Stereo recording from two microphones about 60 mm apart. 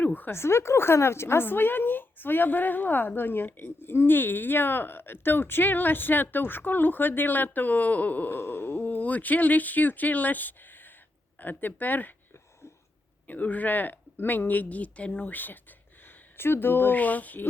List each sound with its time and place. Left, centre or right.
0.0 s a sound: left
0.3 s a woman's voice: left
8.4 s a woman's voice: left
13.2 s a woman's voice: left